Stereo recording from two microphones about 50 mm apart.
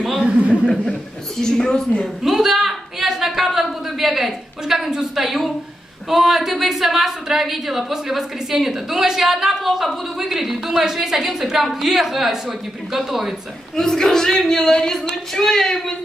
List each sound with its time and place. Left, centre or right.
0.2 s speech: right
1.4 s a man's voice: centre
2.2 s a woman's voice: centre
13.7 s a man's voice: centre